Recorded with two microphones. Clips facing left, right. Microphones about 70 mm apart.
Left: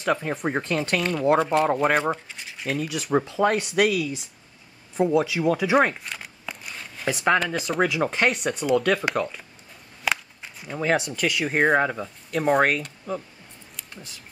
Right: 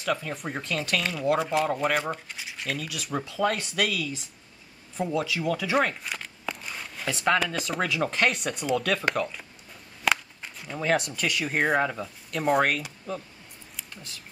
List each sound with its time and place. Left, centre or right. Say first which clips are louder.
0.0 s speech: left 5 dB; left
1.4 s speech: left 5 dB; centre
2.9 s speech: left 8 dB; left
6.1 s a sound: right 2 dB; centre
7.1 s speech: left 3 dB; centre
10.0 s a sound: right 1 dB; centre
11.5 s speech: left 4 dB; centre